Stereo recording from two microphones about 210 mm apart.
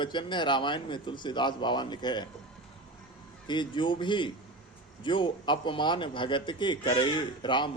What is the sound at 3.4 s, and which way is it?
Speech, 20° left (ahead or behind).